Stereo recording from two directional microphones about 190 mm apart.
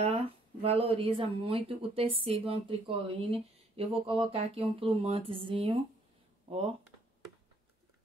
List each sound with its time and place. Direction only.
0.0 s speech: 30° right (ahead or behind)